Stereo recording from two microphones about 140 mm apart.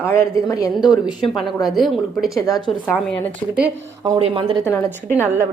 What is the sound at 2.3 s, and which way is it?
Speech, 25° left (ahead or behind).